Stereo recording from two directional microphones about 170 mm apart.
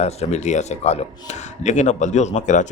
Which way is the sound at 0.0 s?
40° left (ahead or behind).